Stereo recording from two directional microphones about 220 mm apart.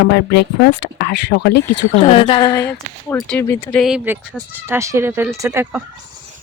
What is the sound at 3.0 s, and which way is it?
Speech, 5° left (ahead or behind).